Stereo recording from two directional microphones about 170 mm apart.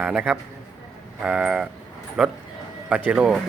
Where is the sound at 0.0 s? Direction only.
5° right (ahead or behind).